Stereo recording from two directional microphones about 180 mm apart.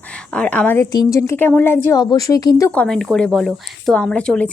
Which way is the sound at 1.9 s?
20° left (ahead or behind).